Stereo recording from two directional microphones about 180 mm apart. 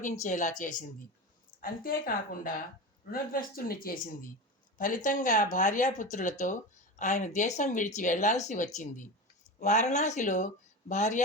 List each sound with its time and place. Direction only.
0.0 s speech: 45° left (ahead or behind)